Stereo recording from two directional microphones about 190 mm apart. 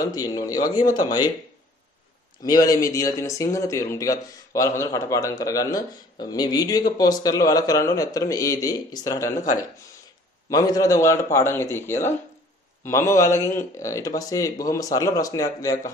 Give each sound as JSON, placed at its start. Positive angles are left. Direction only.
{"t": 0.0, "sound": "speech", "side_deg": 20}
{"t": 2.4, "sound": "speech", "side_deg": 20}
{"t": 10.5, "sound": "speech", "side_deg": 20}